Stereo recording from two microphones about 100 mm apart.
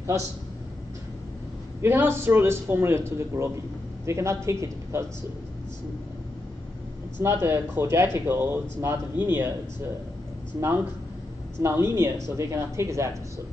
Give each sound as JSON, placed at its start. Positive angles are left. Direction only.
{"t": 1.8, "sound": "speech", "side_deg": -25}
{"t": 7.2, "sound": "speech", "side_deg": -25}
{"t": 11.6, "sound": "speech", "side_deg": -25}